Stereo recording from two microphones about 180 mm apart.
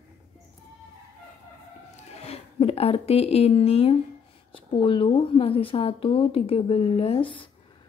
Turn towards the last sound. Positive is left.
turn(degrees=30)  # may be behind; listen again after turning